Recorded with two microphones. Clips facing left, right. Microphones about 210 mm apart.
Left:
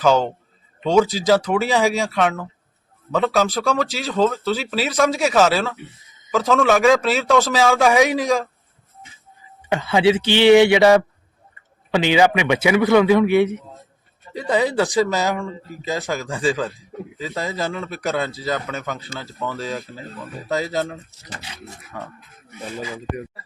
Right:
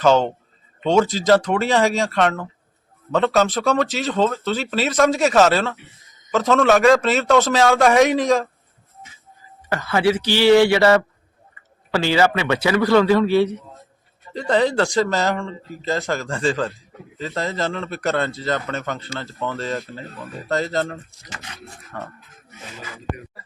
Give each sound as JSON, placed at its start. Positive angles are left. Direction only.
{"t": 0.9, "sound": "speech", "side_deg": 0}
{"t": 9.6, "sound": "a man's voice", "side_deg": 15}
{"t": 14.3, "sound": "speech", "side_deg": 5}